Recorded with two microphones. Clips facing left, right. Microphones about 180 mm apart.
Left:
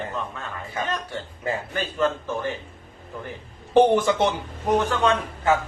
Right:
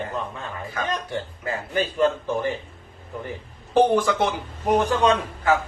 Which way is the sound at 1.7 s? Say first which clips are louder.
Right 5 dB; 15° right (ahead or behind).